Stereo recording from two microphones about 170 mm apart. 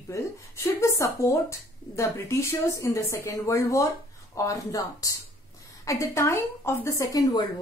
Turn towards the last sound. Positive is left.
turn(degrees=20)  # may be behind; listen again after turning